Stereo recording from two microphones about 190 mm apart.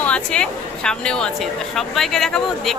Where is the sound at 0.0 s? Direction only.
5° left (ahead or behind).